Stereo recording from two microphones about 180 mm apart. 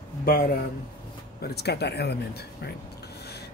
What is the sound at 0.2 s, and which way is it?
Speech, 55° left (ahead or behind).